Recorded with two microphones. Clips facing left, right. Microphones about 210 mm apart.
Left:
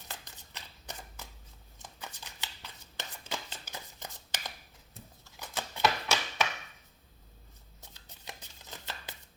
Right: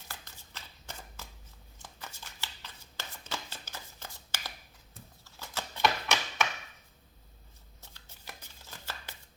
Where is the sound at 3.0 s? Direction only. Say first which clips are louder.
Left 1 dB; 15° left (ahead or behind).